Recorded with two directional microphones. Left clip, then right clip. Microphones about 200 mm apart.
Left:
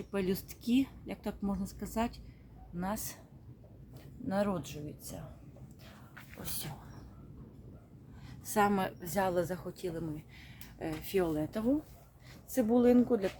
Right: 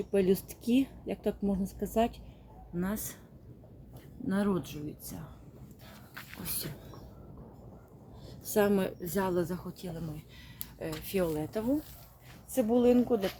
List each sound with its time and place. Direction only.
0.1 s a woman's voice: 5° left (ahead or behind)
4.3 s a woman's voice: 10° left (ahead or behind)
8.5 s a woman's voice: 10° left (ahead or behind)